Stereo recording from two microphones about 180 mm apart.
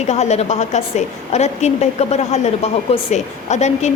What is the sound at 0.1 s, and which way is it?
A woman's voice, 40° left (ahead or behind).